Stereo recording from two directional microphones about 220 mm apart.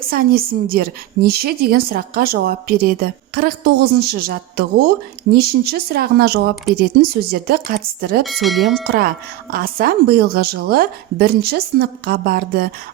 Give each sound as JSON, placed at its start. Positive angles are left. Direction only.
{"t": 0.1, "sound": "a woman's voice", "side_deg": -40}
{"t": 8.2, "sound": "speech", "side_deg": 0}
{"t": 8.9, "sound": "a woman's voice", "side_deg": -40}